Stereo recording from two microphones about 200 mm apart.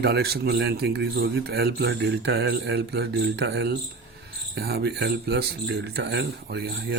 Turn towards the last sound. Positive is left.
turn(degrees=-60)  # may be behind; listen again after turning